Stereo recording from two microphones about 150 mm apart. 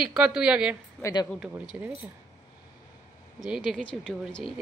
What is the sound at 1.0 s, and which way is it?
Speech, 25° left (ahead or behind).